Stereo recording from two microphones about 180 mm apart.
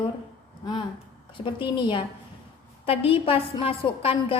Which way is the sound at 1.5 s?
25° left (ahead or behind).